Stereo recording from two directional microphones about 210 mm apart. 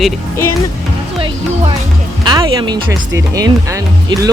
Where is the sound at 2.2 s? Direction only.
20° right (ahead or behind).